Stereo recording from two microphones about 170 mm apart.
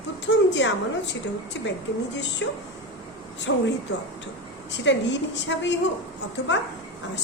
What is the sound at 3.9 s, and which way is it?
A woman's voice, 90° left.